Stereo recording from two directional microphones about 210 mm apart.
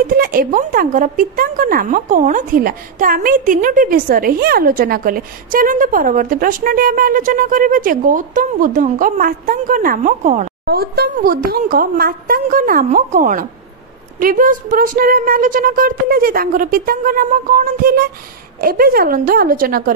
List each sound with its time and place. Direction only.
0.0 s speech: 45° right (ahead or behind)
10.6 s speech: 50° right (ahead or behind)